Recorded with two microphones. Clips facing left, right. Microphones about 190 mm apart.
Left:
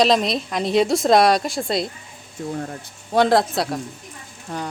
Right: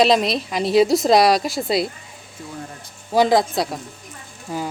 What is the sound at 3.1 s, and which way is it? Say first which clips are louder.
Speech: right 1 dB; centre (ahead or behind).